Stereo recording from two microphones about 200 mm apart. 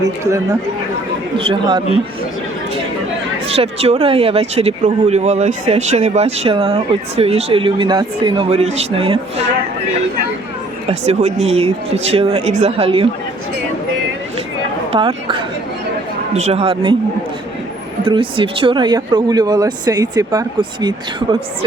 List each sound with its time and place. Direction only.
1.4 s speech: 25° right (ahead or behind)
3.4 s speech: 30° right (ahead or behind)
10.8 s speech: 35° right (ahead or behind)
14.9 s speech: 25° right (ahead or behind)
18.0 s speech: 25° right (ahead or behind)